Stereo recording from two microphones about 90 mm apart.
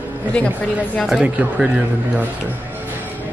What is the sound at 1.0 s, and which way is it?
Speech, 10° right (ahead or behind).